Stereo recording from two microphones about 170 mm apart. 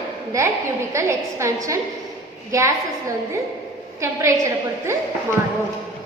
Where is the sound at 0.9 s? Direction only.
15° right (ahead or behind).